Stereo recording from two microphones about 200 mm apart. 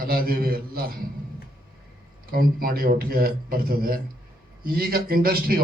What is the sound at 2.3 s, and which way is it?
Speech, 45° right (ahead or behind).